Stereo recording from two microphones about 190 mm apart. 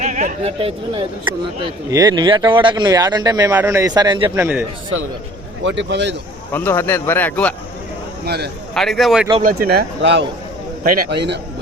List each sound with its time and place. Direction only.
0.0 s speech: 40° right (ahead or behind); by 4.3 s 20° right (ahead or behind)
4.4 s a man's voice: 10° right (ahead or behind)
5.6 s speech: 70° right (ahead or behind)
6.5 s speech: 10° left (ahead or behind)
8.2 s speech: 55° right (ahead or behind)
8.7 s speech: centre (ahead or behind)
9.4 s speech: 50° right (ahead or behind)